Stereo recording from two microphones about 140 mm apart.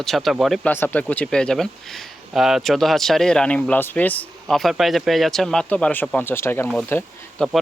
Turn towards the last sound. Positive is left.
turn(degrees=0)  # may be behind; listen again after turning